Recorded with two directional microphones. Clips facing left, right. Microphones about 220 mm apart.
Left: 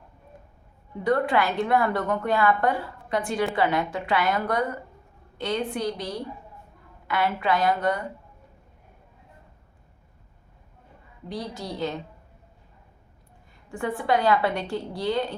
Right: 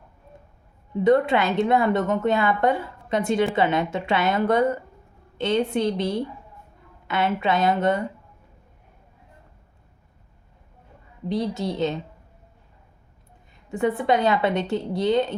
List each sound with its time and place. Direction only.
1.0 s a woman's voice: 25° right (ahead or behind)
11.3 s a woman's voice: 25° right (ahead or behind)
13.7 s a woman's voice: 20° right (ahead or behind)